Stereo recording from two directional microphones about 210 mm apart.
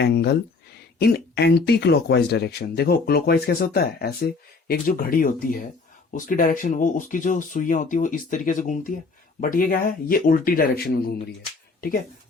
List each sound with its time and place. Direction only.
0.0 s speech: 50° left (ahead or behind)